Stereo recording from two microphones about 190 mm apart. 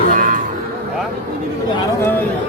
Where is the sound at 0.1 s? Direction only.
45° right (ahead or behind).